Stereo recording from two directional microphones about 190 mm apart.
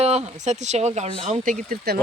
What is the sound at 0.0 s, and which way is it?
Speech, 35° right (ahead or behind).